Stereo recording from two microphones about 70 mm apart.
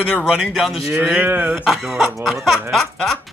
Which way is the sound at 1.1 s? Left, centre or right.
Right.